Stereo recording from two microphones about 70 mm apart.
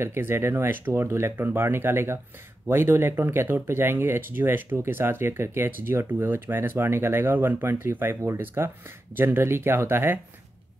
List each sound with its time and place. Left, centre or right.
0.0 s speech: right